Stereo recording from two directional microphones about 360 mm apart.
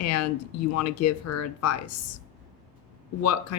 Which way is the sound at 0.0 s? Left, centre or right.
Left.